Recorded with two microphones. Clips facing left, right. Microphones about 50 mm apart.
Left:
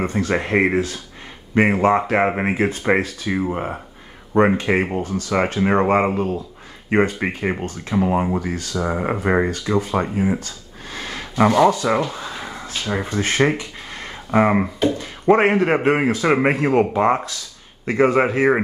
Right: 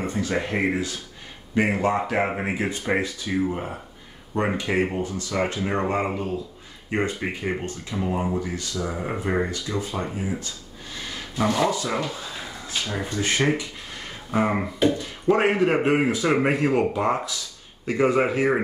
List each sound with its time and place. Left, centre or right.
0.0 s speech: left
10.0 s a sound: left
12.9 s speech: left